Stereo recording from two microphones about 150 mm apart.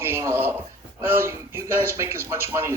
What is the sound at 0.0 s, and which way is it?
A man's voice, 20° right (ahead or behind).